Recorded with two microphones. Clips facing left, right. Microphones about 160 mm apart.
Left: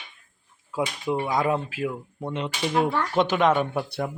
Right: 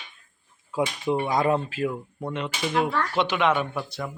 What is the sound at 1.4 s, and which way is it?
Speech, 5° left (ahead or behind).